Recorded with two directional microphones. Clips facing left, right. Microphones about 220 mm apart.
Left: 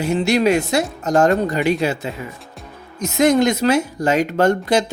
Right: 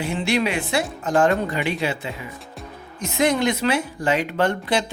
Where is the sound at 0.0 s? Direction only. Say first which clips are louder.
Left 6 dB; 40° left (ahead or behind).